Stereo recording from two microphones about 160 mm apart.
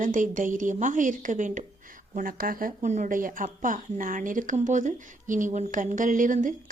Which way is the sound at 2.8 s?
45° right (ahead or behind).